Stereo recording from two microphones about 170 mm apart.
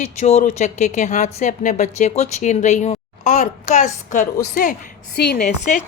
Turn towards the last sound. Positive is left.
turn(degrees=50)  # may be behind; listen again after turning